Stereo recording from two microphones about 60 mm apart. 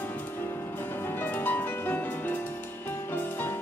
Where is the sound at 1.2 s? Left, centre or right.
Left.